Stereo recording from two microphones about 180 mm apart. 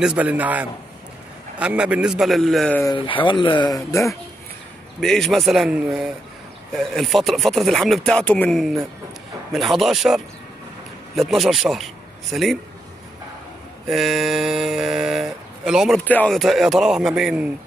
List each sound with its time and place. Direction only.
0.0 s a man's voice: 5° right (ahead or behind)
3.0 s speech: 30° left (ahead or behind)
5.0 s speech: centre (ahead or behind)
13.8 s speech: centre (ahead or behind)
16.0 s speech: 10° left (ahead or behind)